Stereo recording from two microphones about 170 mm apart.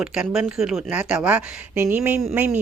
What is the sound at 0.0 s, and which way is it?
A woman's voice, 5° right (ahead or behind).